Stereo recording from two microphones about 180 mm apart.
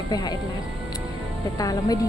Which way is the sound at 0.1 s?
20° left (ahead or behind).